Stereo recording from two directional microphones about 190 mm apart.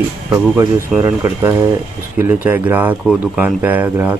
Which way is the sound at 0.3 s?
15° right (ahead or behind).